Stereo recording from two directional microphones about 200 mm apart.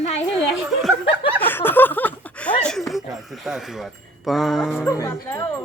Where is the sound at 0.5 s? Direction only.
Centre (ahead or behind).